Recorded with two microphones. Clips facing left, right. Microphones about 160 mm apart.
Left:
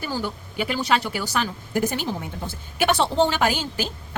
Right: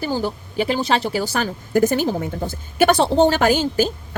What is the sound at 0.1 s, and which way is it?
Speech, 35° right (ahead or behind).